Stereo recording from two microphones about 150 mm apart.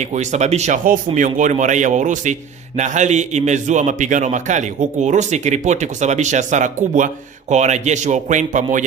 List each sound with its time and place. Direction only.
0.0 s a man's voice: 50° right (ahead or behind)
0.8 s a man's voice: 60° right (ahead or behind)